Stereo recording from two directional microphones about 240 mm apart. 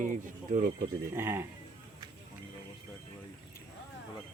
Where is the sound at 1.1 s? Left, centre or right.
Centre.